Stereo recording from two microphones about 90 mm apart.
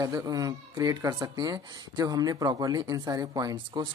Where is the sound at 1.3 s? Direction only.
50° right (ahead or behind).